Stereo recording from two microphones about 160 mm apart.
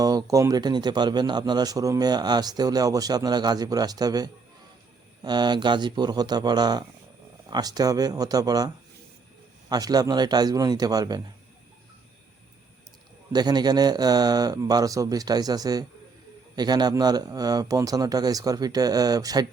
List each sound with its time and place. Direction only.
0.0 s speech: 25° right (ahead or behind)
13.3 s speech: 25° right (ahead or behind)